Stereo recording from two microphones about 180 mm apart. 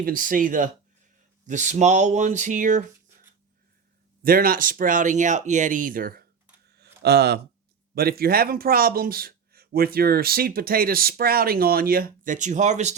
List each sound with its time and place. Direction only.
0.0 s speech: 50° right (ahead or behind)
4.2 s speech: 55° right (ahead or behind)
6.7 s a sound: 65° right (ahead or behind)
7.9 s speech: 55° right (ahead or behind); by 13.0 s 40° right (ahead or behind)